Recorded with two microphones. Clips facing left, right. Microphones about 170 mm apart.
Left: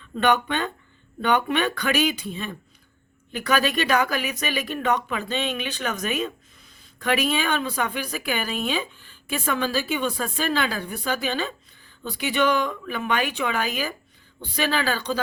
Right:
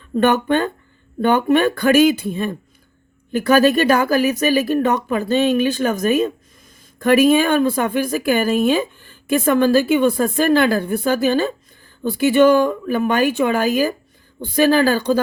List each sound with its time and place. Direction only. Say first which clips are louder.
0.2 s speech: right 6 dB; 45° right (ahead or behind)